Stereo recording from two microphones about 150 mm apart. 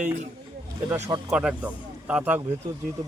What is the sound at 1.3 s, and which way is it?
Speech, 5° right (ahead or behind).